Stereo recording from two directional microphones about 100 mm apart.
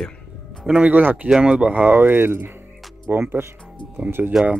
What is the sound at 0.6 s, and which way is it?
Speech, 10° right (ahead or behind).